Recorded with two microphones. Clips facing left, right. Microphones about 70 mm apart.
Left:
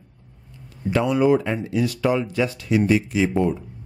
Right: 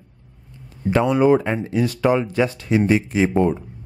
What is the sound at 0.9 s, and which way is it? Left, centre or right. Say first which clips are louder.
Speech: right 2 dB; right.